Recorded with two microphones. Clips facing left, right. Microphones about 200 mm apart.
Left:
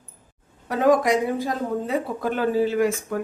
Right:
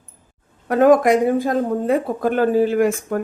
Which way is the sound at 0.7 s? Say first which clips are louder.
Right 6 dB; 55° right (ahead or behind).